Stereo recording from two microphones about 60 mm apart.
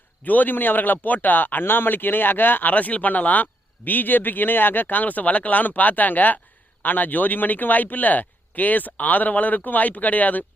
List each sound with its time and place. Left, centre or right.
0.3 s speech: left